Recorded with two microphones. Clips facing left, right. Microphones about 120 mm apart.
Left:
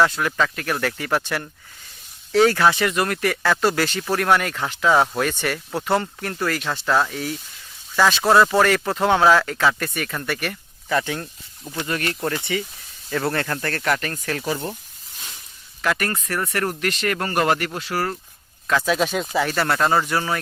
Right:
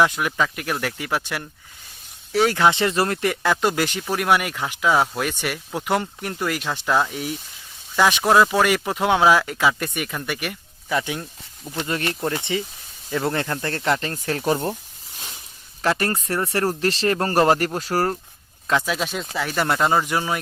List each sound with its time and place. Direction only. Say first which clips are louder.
0.0 s speech: even; 15° right (ahead or behind)
2.6 s speech: even; 20° right (ahead or behind)
11.7 s speech: even; 25° right (ahead or behind)
14.4 s speech: right 7 dB; 40° right (ahead or behind)
15.8 s speech: right 2 dB; 30° right (ahead or behind)
18.9 s speech: left 5 dB; centre (ahead or behind)
19.5 s speech: right 2 dB; 15° right (ahead or behind)